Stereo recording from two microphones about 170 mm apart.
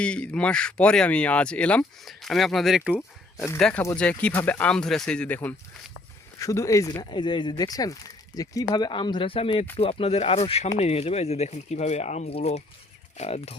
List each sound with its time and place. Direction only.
0.0 s speech: 5° left (ahead or behind)
2.9 s speech: 15° left (ahead or behind); by 13.6 s 40° left (ahead or behind)